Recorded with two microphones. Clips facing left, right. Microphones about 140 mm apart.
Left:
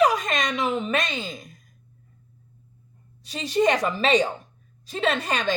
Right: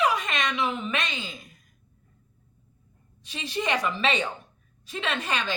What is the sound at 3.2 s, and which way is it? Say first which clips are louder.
A woman's voice: left 8 dB; 40° left (ahead or behind).